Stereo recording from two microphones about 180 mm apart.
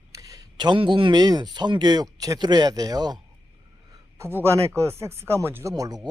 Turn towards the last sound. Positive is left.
turn(degrees=-20)  # may be behind; listen again after turning